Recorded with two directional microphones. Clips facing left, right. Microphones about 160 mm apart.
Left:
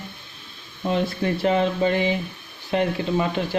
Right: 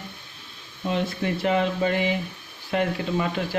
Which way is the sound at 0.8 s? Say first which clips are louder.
Left 3 dB; 35° left (ahead or behind).